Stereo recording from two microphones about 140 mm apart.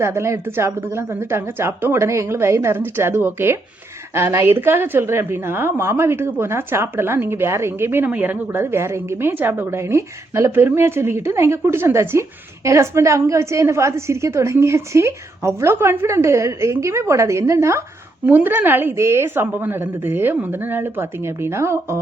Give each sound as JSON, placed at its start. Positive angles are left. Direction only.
{"t": 0.0, "sound": "a woman's voice", "side_deg": -20}